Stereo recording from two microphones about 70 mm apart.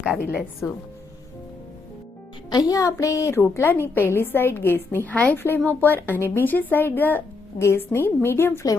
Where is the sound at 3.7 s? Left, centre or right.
Left.